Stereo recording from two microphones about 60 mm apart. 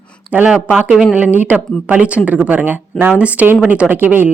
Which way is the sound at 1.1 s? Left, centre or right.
Right.